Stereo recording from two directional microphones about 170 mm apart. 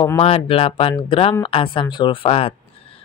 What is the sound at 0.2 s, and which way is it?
A woman's voice, 35° left (ahead or behind).